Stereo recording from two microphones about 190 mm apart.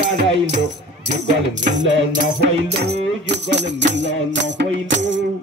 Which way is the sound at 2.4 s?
60° right (ahead or behind).